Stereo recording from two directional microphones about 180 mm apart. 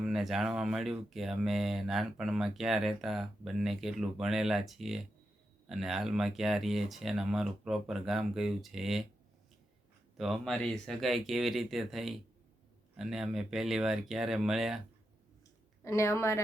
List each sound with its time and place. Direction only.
0.0 s speech: centre (ahead or behind)
10.2 s speech: centre (ahead or behind)
15.8 s a woman's voice: 15° left (ahead or behind)